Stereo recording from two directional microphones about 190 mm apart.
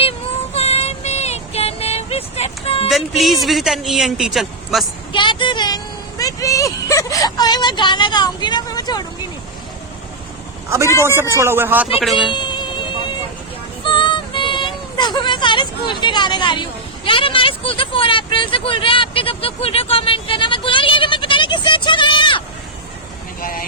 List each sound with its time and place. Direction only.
0.5 s a sound: 35° left (ahead or behind)
2.9 s speech: centre (ahead or behind)
5.1 s a sound: 25° left (ahead or behind)
11.0 s speech: 10° right (ahead or behind)
12.3 s cat: 25° left (ahead or behind)
13.8 s child singing: 25° left (ahead or behind)
23.4 s vehicle: 50° left (ahead or behind)